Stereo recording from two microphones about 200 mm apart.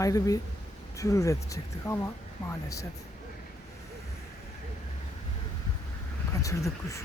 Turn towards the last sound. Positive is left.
turn(degrees=15)  # may be behind; listen again after turning